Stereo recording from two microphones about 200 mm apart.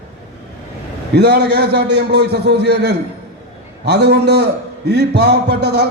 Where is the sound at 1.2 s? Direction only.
55° right (ahead or behind).